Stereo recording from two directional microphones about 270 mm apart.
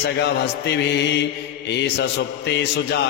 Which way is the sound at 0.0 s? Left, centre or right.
Left.